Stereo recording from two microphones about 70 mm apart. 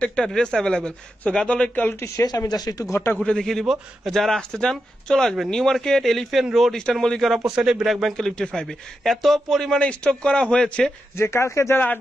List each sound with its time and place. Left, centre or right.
0.2 s speech: centre
2.1 s speech: left
2.8 s a man's voice: left
3.2 s speech: centre
7.4 s speech: centre
9.8 s speech: centre
11.1 s a man's voice: left